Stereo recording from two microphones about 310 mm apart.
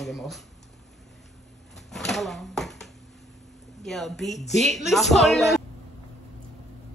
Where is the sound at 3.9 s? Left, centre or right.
Centre.